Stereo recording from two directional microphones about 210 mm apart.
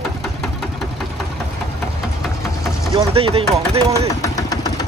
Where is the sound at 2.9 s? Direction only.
25° right (ahead or behind).